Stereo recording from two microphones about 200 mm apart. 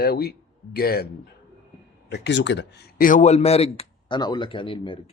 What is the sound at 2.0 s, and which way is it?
Speech, 60° left (ahead or behind).